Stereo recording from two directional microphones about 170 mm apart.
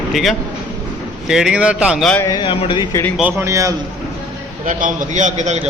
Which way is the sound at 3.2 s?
10° right (ahead or behind).